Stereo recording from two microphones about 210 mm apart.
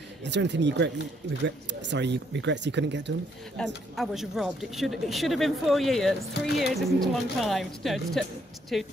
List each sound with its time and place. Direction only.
0.2 s speech: 55° right (ahead or behind)
3.5 s speech: centre (ahead or behind)